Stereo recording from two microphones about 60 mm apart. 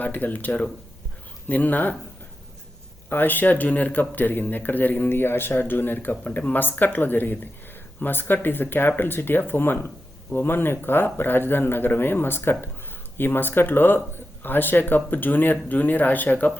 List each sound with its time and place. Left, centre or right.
0.0 s speech: left
3.1 s speech: left